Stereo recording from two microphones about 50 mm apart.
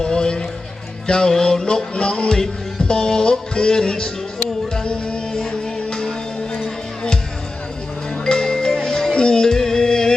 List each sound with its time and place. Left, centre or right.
0.0 s a sound: centre
1.0 s music: centre
8.2 s music: centre